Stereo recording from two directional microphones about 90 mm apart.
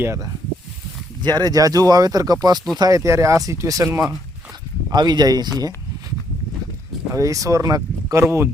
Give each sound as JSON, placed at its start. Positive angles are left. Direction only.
{"t": 0.0, "sound": "speech", "side_deg": -30}
{"t": 1.2, "sound": "speech", "side_deg": -50}
{"t": 4.9, "sound": "speech", "side_deg": -50}
{"t": 7.1, "sound": "speech", "side_deg": -40}